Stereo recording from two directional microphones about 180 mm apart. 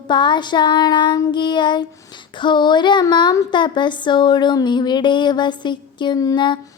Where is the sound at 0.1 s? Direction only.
25° left (ahead or behind).